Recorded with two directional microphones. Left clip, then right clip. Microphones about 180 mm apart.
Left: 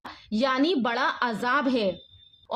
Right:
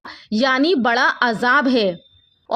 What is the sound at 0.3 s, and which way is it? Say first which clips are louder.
A woman's voice: right 7 dB; 40° right (ahead or behind).